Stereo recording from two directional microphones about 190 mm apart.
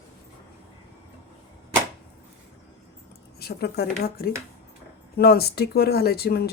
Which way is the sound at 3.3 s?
55° left (ahead or behind).